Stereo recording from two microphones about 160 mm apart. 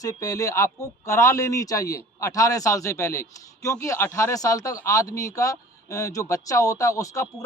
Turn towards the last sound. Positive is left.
turn(degrees=20)  # may be behind; listen again after turning